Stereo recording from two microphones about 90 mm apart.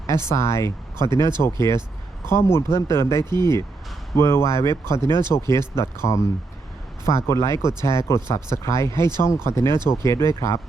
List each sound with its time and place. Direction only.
0.3 s speech: 30° left (ahead or behind)
3.2 s speech: 50° right (ahead or behind)
4.2 s speech: 30° left (ahead or behind)